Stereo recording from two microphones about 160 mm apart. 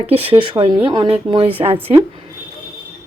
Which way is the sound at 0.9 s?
35° right (ahead or behind).